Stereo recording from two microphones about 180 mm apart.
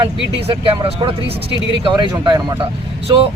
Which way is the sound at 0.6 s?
30° right (ahead or behind).